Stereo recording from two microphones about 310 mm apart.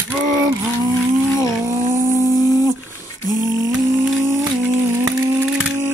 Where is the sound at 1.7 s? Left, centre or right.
Centre.